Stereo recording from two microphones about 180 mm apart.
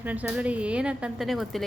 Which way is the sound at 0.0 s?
10° right (ahead or behind).